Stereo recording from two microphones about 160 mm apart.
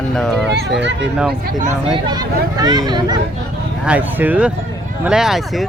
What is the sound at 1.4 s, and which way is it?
Speech, 55° right (ahead or behind).